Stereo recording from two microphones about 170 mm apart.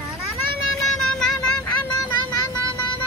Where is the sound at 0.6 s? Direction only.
5° left (ahead or behind).